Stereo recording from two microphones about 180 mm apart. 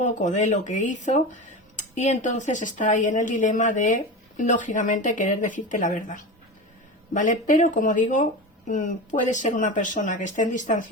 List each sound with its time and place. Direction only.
0.0 s a woman's voice: 40° left (ahead or behind)